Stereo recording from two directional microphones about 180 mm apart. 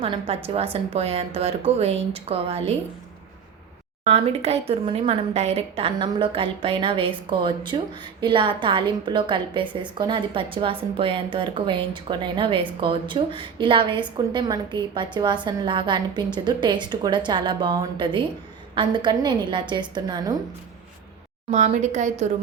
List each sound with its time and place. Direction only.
0.0 s a woman's voice: 30° right (ahead or behind)
4.0 s a woman's voice: 35° right (ahead or behind)
21.5 s a woman's voice: 40° right (ahead or behind)